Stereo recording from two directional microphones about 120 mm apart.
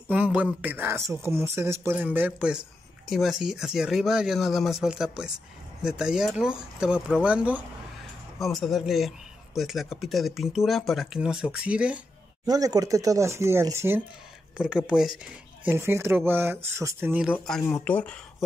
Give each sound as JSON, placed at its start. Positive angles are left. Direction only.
{"t": 0.1, "sound": "speech", "side_deg": -10}
{"t": 8.4, "sound": "speech", "side_deg": 0}
{"t": 12.4, "sound": "speech", "side_deg": -30}
{"t": 14.6, "sound": "speech", "side_deg": -5}
{"t": 15.6, "sound": "speech", "side_deg": -20}
{"t": 17.7, "sound": "speech", "side_deg": 10}